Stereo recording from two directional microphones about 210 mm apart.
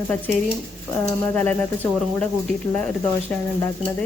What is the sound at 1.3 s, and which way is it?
Speech, 5° left (ahead or behind).